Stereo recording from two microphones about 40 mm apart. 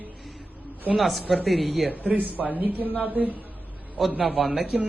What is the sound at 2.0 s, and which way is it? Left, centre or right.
Speech, right.